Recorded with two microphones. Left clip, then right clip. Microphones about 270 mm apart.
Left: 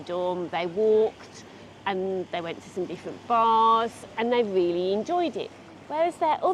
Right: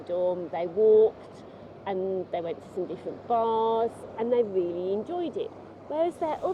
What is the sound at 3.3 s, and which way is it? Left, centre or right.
Speech, left.